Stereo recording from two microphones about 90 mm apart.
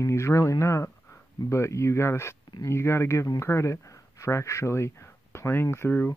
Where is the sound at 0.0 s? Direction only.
35° left (ahead or behind).